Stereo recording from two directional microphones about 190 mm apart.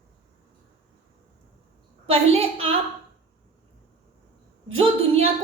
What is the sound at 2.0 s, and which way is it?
Speech, 30° right (ahead or behind).